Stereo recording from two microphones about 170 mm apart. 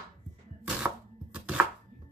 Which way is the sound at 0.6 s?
5° right (ahead or behind).